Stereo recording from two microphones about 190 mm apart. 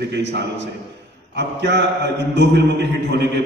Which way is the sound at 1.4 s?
65° right (ahead or behind).